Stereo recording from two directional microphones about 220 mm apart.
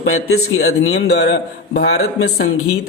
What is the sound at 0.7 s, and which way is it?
Speech, 50° left (ahead or behind).